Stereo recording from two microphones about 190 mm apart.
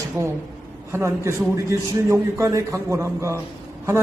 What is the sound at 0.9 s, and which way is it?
A man's voice, 15° right (ahead or behind).